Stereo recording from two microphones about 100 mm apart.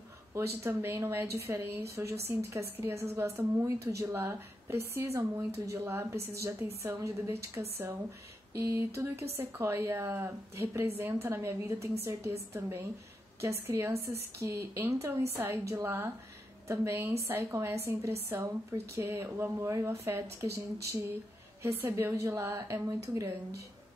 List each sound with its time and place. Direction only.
0.3 s a woman's voice: 25° right (ahead or behind)